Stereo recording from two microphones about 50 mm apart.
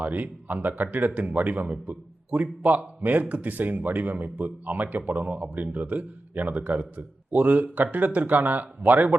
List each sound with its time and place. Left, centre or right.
0.0 s a man's voice: right